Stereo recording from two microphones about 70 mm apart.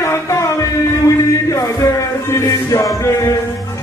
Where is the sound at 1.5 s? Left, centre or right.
Left.